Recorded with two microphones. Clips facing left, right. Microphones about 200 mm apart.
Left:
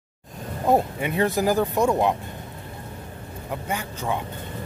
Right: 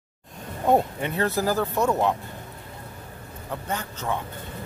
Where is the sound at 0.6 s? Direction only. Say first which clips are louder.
Even; 5° left (ahead or behind).